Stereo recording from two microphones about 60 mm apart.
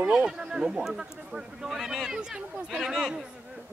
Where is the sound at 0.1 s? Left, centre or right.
Centre.